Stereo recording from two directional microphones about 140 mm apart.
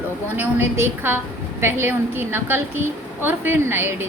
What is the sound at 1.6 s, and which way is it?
A woman's voice, 15° right (ahead or behind).